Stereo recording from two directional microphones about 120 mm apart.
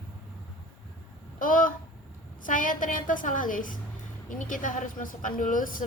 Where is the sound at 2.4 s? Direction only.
90° left.